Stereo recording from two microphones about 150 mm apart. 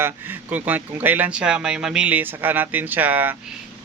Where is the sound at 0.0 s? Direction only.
10° right (ahead or behind).